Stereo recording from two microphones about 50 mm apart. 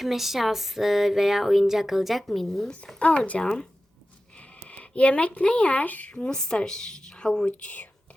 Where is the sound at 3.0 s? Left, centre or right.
Left.